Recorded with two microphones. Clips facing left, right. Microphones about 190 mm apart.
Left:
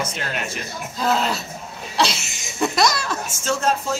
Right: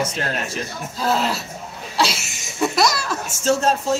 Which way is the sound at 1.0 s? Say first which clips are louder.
Even; 5° right (ahead or behind).